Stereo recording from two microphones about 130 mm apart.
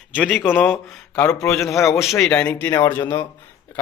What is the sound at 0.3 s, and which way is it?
Speech, 15° left (ahead or behind).